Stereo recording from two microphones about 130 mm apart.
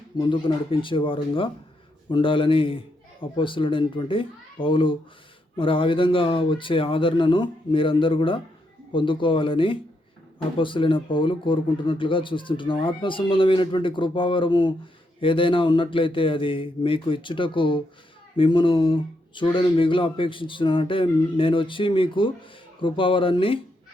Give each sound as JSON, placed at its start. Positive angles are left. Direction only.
{"t": 0.2, "sound": "speech", "side_deg": 40}